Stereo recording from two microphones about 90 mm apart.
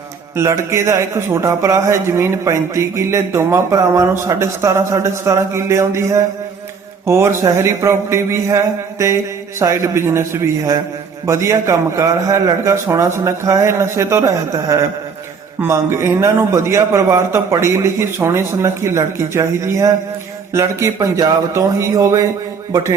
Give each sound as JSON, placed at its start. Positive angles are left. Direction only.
{"t": 0.3, "sound": "a man's voice", "side_deg": -35}